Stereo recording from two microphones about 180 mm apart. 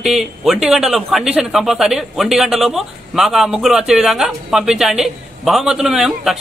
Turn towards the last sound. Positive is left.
turn(degrees=0)  # may be behind; listen again after turning